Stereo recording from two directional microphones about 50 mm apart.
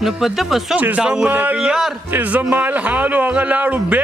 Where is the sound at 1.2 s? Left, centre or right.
Right.